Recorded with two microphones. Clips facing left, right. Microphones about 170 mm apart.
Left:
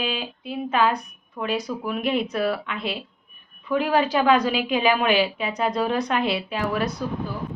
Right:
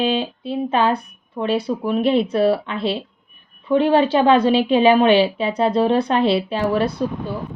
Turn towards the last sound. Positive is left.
turn(degrees=-30)  # may be behind; listen again after turning